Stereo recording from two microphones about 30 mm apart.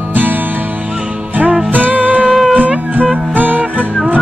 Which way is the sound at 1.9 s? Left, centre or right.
Right.